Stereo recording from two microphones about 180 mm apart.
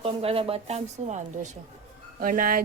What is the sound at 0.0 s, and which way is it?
A woman's voice, 35° right (ahead or behind).